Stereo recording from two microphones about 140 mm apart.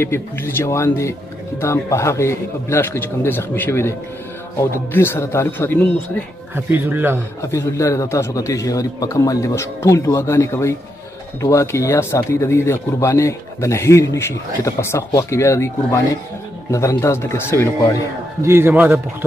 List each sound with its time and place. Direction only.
0.0 s a man's voice: 15° left (ahead or behind)
6.5 s speech: 15° right (ahead or behind)
7.4 s speech: 20° left (ahead or behind)
18.4 s speech: 15° right (ahead or behind)